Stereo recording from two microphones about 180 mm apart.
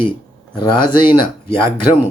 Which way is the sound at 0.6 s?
25° left (ahead or behind).